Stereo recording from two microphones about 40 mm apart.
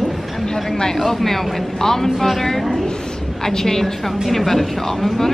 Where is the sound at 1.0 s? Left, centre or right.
Centre.